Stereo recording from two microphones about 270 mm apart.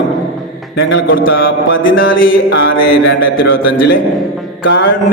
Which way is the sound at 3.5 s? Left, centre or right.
Left.